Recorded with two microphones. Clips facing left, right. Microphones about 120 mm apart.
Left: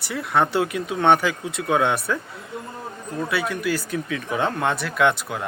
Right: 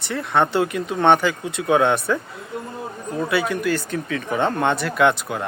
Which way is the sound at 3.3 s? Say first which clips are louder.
Right 3 dB; centre (ahead or behind).